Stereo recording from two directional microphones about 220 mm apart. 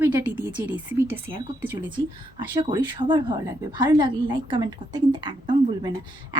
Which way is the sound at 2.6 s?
20° right (ahead or behind).